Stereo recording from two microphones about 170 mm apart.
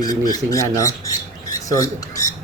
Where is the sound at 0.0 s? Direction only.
20° left (ahead or behind).